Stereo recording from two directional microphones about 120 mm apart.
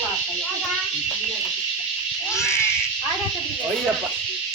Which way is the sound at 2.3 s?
20° left (ahead or behind).